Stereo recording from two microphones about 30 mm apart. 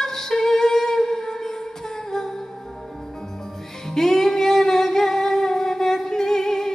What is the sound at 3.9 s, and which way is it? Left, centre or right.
Humming, centre.